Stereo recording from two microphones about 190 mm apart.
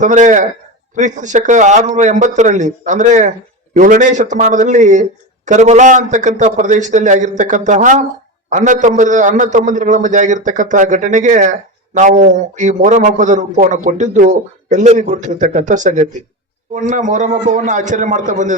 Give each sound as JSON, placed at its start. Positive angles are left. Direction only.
{"t": 0.0, "sound": "a man's voice", "side_deg": -40}